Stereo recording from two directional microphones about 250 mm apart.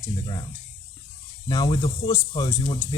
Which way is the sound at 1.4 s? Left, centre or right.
Centre.